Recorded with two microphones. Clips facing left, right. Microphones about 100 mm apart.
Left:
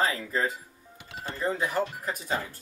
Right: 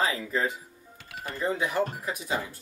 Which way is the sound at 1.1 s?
25° left (ahead or behind).